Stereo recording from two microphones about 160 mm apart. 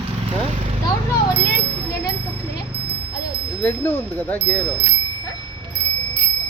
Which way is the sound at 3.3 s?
15° left (ahead or behind).